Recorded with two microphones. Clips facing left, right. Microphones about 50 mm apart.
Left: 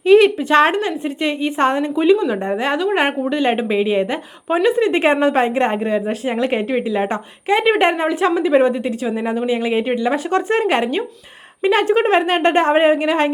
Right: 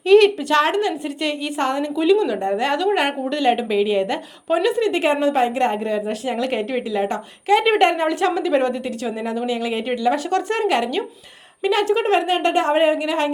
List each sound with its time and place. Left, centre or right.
0.0 s a woman's voice: centre
7.6 s a woman's voice: centre; by 13.3 s left